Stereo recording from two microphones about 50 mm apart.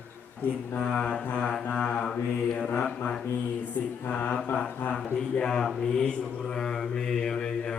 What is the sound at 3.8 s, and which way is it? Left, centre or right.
Mantra, left.